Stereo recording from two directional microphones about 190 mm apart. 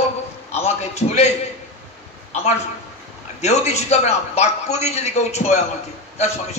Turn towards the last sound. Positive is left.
turn(degrees=35)  # may be behind; listen again after turning